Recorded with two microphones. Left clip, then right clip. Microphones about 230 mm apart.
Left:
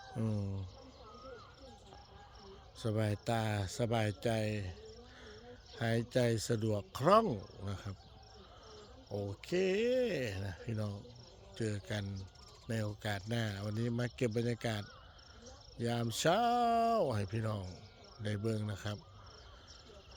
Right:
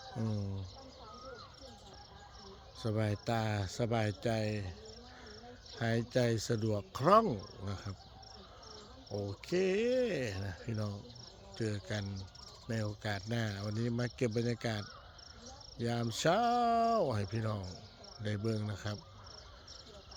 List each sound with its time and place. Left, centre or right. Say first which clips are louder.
0.2 s music: left 1 dB; centre
2.7 s speech: even; centre
5.8 s speech: even; centre
9.0 s speech: right 1 dB; centre